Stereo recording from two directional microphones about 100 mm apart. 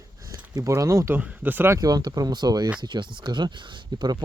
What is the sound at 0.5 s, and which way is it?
Speech, 35° right (ahead or behind).